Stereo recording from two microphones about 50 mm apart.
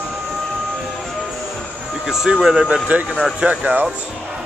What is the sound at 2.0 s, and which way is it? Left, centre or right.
Speech, centre.